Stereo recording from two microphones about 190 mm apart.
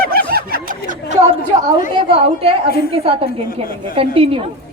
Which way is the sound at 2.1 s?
30° right (ahead or behind).